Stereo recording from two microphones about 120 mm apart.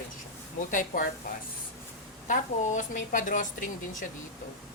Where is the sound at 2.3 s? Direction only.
90° left.